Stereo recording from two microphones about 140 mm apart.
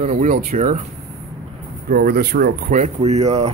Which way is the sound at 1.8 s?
90° right.